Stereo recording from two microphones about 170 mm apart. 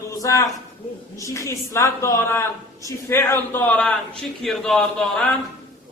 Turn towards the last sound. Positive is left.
turn(degrees=5)  # may be behind; listen again after turning